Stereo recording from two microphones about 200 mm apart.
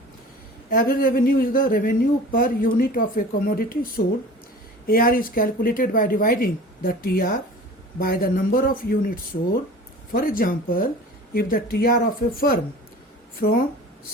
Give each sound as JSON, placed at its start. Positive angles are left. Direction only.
{"t": 0.7, "sound": "speech", "side_deg": 45}
{"t": 13.4, "sound": "speech", "side_deg": 50}